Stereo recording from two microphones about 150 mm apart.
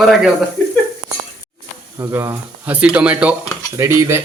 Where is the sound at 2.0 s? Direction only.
20° right (ahead or behind).